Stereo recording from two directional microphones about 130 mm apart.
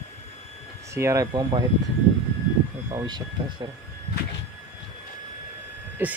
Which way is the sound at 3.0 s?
35° right (ahead or behind).